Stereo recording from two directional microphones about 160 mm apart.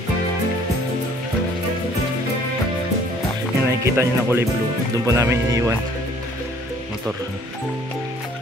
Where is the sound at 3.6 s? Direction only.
15° right (ahead or behind).